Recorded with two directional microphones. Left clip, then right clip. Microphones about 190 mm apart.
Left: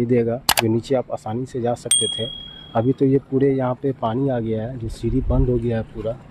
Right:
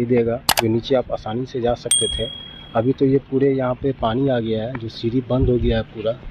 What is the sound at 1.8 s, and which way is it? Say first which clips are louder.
Speech: right 1 dB; centre (ahead or behind).